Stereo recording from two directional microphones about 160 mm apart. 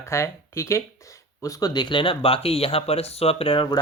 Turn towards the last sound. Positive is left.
turn(degrees=30)  # may be behind; listen again after turning